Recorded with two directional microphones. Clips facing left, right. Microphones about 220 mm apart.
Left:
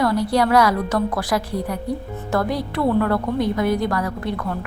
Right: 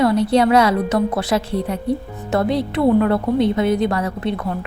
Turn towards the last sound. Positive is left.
turn(degrees=-20)  # may be behind; listen again after turning